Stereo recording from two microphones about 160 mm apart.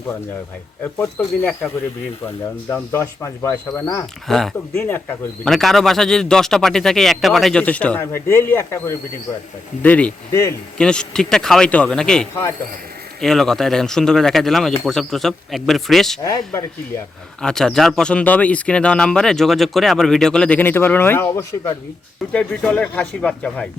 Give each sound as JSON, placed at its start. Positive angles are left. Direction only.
{"t": 0.9, "sound": "speech", "side_deg": 10}
{"t": 4.3, "sound": "speech", "side_deg": 0}
{"t": 4.7, "sound": "speech", "side_deg": 15}
{"t": 5.5, "sound": "speech", "side_deg": 0}
{"t": 16.2, "sound": "speech", "side_deg": 20}
{"t": 17.4, "sound": "speech", "side_deg": 5}